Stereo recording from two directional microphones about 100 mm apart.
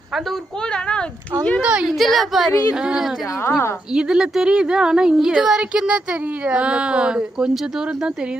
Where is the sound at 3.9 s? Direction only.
5° right (ahead or behind).